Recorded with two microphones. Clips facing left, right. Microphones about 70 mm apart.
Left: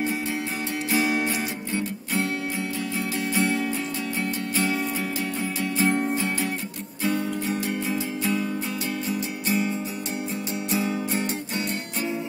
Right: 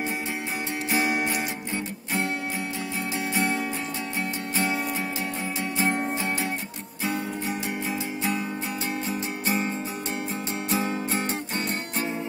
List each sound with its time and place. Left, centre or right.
0.9 s music: right
3.3 s music: right
7.1 s music: right
10.7 s music: right